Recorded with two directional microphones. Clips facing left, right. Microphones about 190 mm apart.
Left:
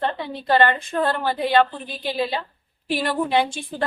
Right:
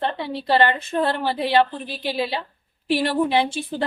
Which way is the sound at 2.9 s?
25° right (ahead or behind).